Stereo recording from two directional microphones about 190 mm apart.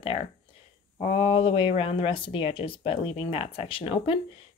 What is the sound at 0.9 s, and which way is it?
Speech, 30° left (ahead or behind).